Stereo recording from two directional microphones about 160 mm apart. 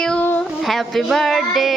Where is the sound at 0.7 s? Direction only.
Centre (ahead or behind).